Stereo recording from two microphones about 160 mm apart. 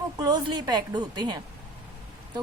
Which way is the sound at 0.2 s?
25° right (ahead or behind).